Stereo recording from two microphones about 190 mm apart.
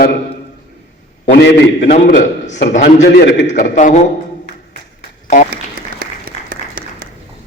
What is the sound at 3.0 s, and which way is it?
Speech, 65° left (ahead or behind).